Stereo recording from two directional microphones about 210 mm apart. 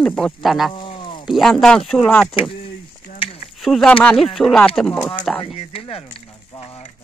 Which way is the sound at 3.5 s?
Centre (ahead or behind).